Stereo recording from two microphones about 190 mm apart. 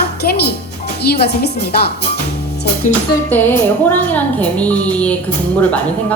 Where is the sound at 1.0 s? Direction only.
60° left (ahead or behind).